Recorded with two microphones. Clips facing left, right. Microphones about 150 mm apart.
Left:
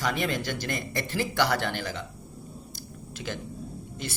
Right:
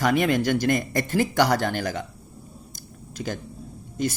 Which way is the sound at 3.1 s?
45° right (ahead or behind).